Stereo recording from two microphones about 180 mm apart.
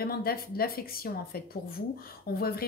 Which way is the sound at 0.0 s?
60° left (ahead or behind).